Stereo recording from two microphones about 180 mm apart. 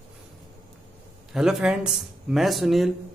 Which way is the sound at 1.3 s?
5° right (ahead or behind).